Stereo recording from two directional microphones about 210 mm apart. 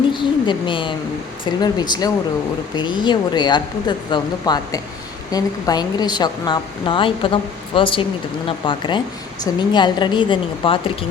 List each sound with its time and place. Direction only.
0.1 s a woman's voice: 20° left (ahead or behind)